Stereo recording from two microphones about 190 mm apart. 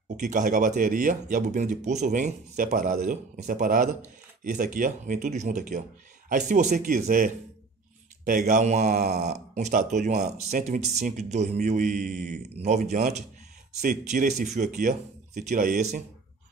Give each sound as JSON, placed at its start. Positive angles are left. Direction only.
{"t": 0.2, "sound": "speech", "side_deg": -40}
{"t": 8.3, "sound": "speech", "side_deg": -40}